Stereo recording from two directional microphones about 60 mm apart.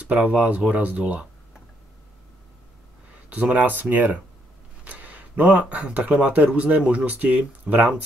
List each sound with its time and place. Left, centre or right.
0.1 s speech: right
3.3 s speech: right